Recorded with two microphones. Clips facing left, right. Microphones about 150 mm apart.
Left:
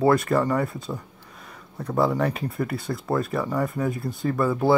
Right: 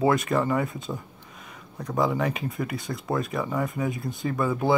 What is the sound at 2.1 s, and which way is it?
Speech, 10° right (ahead or behind).